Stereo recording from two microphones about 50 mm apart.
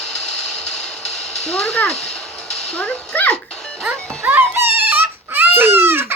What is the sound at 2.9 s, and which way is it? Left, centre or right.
Dog, centre.